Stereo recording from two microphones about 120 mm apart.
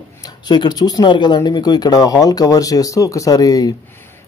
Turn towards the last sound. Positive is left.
turn(degrees=30)  # may be behind; listen again after turning